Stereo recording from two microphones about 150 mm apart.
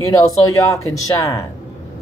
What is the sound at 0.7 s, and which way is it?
Speech, 20° left (ahead or behind).